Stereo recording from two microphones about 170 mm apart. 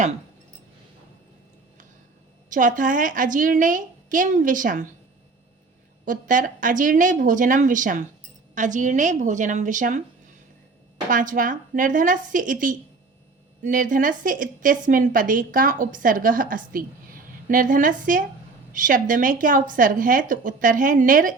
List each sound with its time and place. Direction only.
2.5 s a woman's voice: 50° right (ahead or behind)
6.1 s a woman's voice: 50° right (ahead or behind)
11.1 s a woman's voice: 50° right (ahead or behind)